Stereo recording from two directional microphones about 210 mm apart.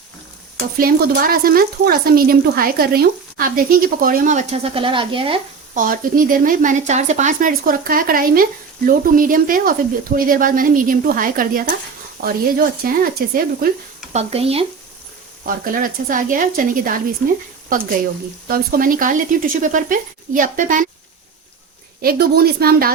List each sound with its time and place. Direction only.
0.8 s speech: 45° right (ahead or behind); by 5.4 s 25° right (ahead or behind)
5.7 s speech: 40° right (ahead or behind)
14.1 s speech: 30° right (ahead or behind)
15.4 s speech: 40° right (ahead or behind)
18.4 s speech: 45° right (ahead or behind)
22.0 s speech: 45° right (ahead or behind)